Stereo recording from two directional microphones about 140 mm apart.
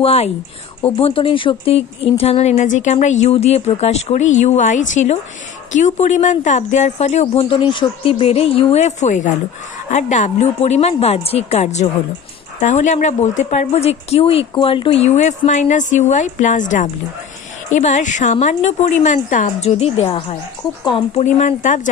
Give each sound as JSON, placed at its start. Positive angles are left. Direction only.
{"t": 0.0, "sound": "a woman's voice", "side_deg": 45}
{"t": 7.7, "sound": "a woman's voice", "side_deg": 40}
{"t": 21.1, "sound": "a woman's voice", "side_deg": 55}